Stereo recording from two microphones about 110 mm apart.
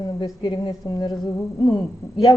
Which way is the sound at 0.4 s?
45° left (ahead or behind).